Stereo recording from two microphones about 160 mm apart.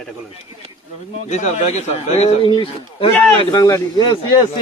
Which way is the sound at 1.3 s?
45° left (ahead or behind).